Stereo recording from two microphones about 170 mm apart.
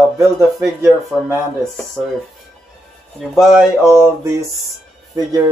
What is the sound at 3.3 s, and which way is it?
Speech, centre (ahead or behind).